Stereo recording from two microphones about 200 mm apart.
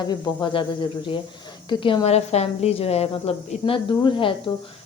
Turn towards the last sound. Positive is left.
turn(degrees=25)  # may be behind; listen again after turning